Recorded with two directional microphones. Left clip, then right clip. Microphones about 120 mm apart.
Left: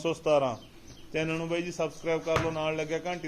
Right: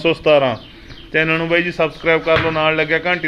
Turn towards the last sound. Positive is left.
turn(degrees=20)  # may be behind; listen again after turning